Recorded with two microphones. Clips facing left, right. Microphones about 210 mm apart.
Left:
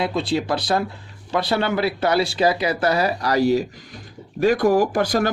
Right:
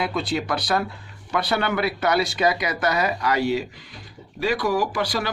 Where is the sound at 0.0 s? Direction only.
25° left (ahead or behind).